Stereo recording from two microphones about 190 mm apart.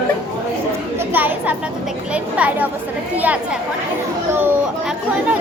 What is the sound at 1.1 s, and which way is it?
Speech, 10° right (ahead or behind).